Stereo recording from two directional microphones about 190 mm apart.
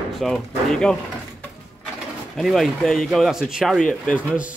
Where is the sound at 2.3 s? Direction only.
Centre (ahead or behind).